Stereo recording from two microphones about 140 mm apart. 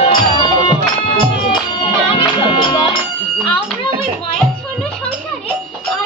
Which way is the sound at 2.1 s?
40° left (ahead or behind).